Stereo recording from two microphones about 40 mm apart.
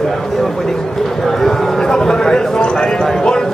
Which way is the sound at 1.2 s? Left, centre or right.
Centre.